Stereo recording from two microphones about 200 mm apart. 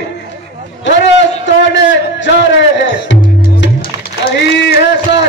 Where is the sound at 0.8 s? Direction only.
65° left (ahead or behind).